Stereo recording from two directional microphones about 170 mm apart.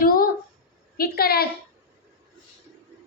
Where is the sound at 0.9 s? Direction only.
65° left (ahead or behind).